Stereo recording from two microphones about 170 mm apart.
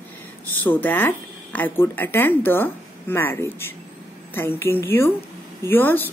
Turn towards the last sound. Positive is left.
turn(degrees=10)  # may be behind; listen again after turning